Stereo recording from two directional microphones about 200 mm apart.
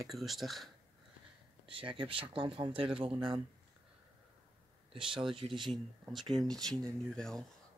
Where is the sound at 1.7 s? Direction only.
25° right (ahead or behind).